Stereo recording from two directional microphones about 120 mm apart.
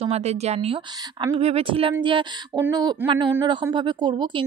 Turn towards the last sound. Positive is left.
turn(degrees=-40)  # may be behind; listen again after turning